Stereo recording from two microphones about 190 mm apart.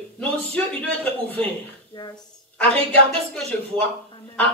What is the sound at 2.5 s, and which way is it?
Speech, 5° left (ahead or behind).